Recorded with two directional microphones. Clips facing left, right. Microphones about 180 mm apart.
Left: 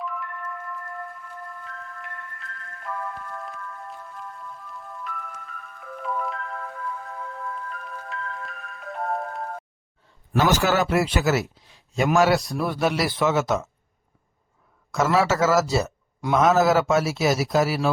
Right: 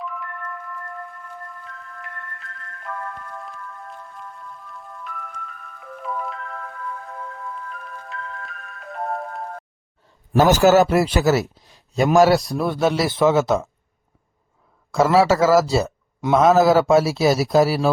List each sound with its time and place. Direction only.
0.0 s music: centre (ahead or behind)
1.6 s glockenspiel: centre (ahead or behind)
7.2 s music: centre (ahead or behind)
10.3 s a man's voice: 45° right (ahead or behind)
14.9 s a man's voice: 30° right (ahead or behind)